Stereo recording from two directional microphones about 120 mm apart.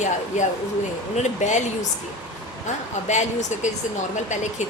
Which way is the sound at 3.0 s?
80° left.